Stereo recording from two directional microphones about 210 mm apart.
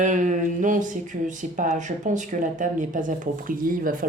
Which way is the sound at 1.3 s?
40° right (ahead or behind).